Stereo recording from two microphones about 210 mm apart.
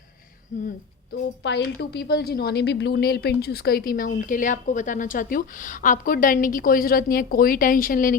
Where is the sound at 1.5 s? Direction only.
55° left (ahead or behind).